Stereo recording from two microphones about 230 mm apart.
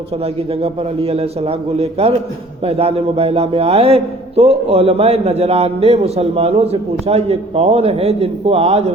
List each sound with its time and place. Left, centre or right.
0.2 s a man's voice: right